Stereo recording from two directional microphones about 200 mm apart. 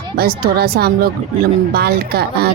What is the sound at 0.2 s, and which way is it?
A woman's voice, 50° right (ahead or behind).